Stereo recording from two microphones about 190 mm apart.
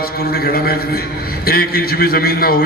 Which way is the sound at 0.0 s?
55° left (ahead or behind).